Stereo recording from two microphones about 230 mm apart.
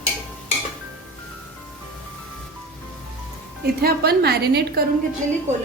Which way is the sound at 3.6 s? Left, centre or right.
Right.